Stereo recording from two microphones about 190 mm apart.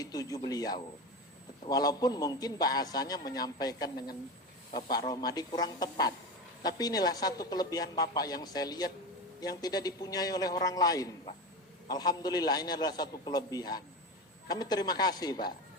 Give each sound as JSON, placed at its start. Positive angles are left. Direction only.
{"t": 0.0, "sound": "a man's voice", "side_deg": 20}
{"t": 3.9, "sound": "speech", "side_deg": 50}
{"t": 4.7, "sound": "a man's voice", "side_deg": 20}